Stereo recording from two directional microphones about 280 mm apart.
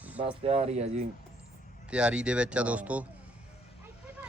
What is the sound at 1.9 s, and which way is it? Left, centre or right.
Speech, centre.